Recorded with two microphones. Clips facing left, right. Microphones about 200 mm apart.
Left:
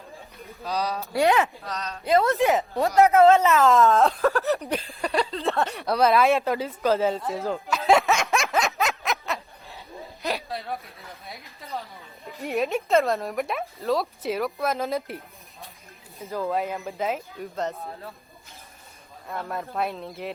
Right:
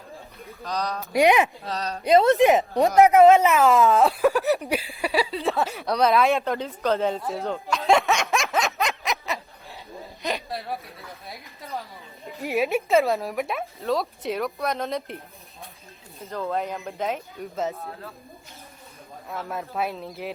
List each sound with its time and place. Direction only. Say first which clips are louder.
0.6 s speech: left 1 dB; 5° left (ahead or behind)
1.1 s speech: right 3 dB; 15° right (ahead or behind)
1.7 s a woman's voice: right 4 dB; 35° right (ahead or behind)
2.0 s speech: right 4 dB; 20° right (ahead or behind)
3.7 s speech: even; centre (ahead or behind)
4.2 s speech: right 2 dB; 15° right (ahead or behind)
10.2 s a sound: even; centre (ahead or behind)
12.4 s speech: right 2 dB; centre (ahead or behind)
19.3 s speech: even; centre (ahead or behind)